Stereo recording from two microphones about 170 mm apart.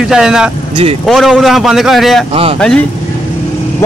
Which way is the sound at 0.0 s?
5° right (ahead or behind).